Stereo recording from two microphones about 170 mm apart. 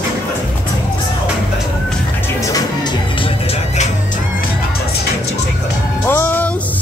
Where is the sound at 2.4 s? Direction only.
25° left (ahead or behind).